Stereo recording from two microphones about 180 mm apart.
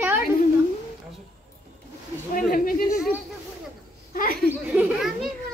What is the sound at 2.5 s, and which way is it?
Speech, 50° left (ahead or behind).